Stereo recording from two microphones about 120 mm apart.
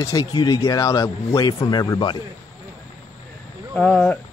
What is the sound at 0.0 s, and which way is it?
A man's voice, 30° left (ahead or behind).